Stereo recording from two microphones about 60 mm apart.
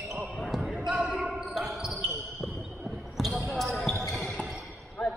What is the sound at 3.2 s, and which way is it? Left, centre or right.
Basketball bounce, centre.